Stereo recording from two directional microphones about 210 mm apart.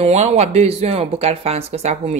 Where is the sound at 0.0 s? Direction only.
30° right (ahead or behind).